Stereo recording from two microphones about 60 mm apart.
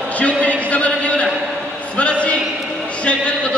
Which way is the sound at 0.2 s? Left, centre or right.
Left.